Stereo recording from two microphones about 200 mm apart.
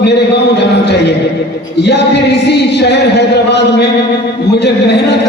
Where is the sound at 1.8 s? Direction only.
55° left (ahead or behind).